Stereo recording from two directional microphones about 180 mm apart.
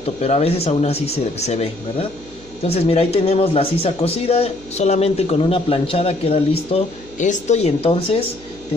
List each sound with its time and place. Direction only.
0.0 s speech: 35° left (ahead or behind)